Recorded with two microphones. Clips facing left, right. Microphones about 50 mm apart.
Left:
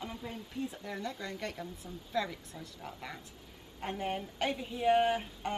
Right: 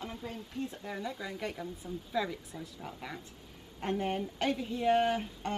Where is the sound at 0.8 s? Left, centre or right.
Centre.